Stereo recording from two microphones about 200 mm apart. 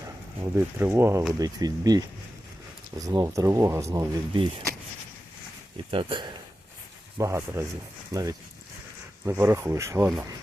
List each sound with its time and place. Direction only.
0.5 s speech: 10° right (ahead or behind)
5.9 s speech: 25° right (ahead or behind)
7.2 s speech: 15° right (ahead or behind)